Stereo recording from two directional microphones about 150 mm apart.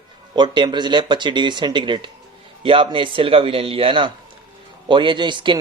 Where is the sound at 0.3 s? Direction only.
30° right (ahead or behind).